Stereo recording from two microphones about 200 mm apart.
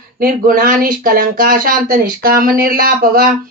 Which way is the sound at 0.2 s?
45° right (ahead or behind).